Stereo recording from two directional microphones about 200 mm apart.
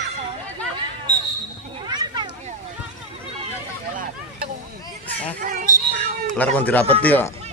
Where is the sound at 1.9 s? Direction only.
20° right (ahead or behind).